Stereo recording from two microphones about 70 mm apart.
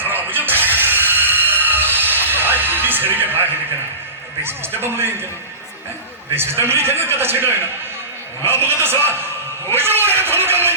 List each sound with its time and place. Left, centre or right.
0.0 s music: right
4.4 s a man's voice: right
6.3 s a man's voice: right